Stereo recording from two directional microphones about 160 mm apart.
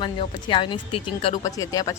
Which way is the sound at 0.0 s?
30° left (ahead or behind).